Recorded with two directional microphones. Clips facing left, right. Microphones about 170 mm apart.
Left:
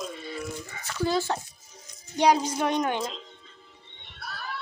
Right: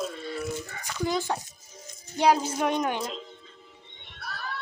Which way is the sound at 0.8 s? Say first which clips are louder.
Left 3 dB; 15° right (ahead or behind).